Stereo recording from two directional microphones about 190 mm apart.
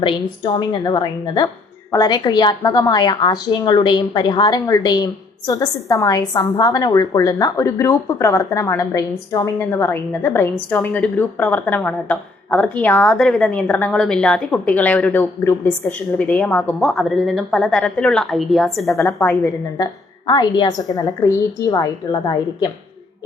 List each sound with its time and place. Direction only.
0.0 s a woman's voice: 25° left (ahead or behind); by 19.5 s 10° left (ahead or behind)
19.8 s a woman's voice: 20° left (ahead or behind)